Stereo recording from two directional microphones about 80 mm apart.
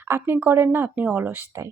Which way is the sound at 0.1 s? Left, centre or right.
Right.